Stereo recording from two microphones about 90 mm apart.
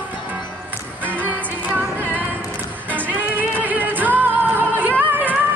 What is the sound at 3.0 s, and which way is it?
Music, 20° right (ahead or behind).